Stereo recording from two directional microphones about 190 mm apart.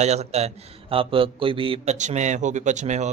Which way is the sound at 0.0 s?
35° right (ahead or behind).